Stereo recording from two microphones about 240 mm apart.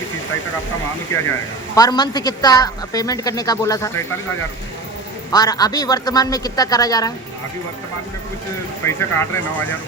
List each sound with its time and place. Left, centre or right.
1.1 s a man's voice: centre
5.3 s a man's voice: centre
8.8 s a man's voice: centre